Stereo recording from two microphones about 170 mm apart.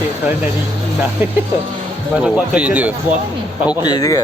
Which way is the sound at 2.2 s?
5° right (ahead or behind).